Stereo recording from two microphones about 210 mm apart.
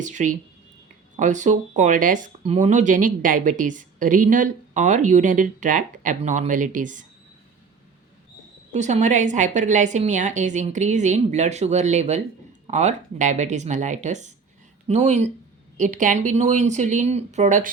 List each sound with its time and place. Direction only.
0.0 s speech: 35° right (ahead or behind)
8.7 s speech: 35° right (ahead or behind)